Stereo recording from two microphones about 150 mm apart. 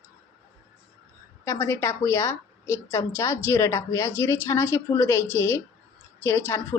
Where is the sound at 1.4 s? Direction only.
15° left (ahead or behind).